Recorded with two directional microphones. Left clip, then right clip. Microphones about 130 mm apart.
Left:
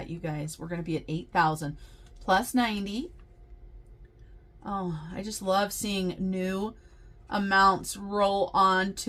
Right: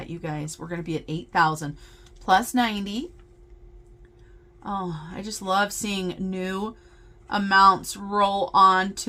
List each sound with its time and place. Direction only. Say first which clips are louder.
0.0 s speech: right 3 dB; 45° right (ahead or behind)
4.6 s speech: right 4 dB; 45° right (ahead or behind)